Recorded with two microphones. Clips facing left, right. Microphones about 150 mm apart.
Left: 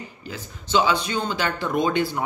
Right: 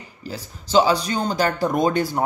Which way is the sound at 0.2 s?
35° right (ahead or behind).